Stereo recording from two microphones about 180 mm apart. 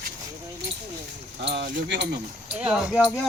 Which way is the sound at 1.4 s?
65° right (ahead or behind).